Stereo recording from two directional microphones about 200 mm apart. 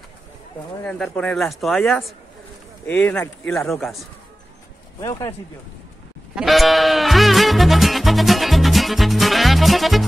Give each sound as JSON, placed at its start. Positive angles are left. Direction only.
{"t": 0.8, "sound": "speech", "side_deg": 5}
{"t": 5.0, "sound": "speech", "side_deg": 15}
{"t": 6.3, "sound": "music", "side_deg": 0}